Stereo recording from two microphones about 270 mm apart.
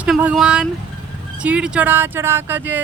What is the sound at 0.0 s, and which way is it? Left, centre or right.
A woman's voice, centre.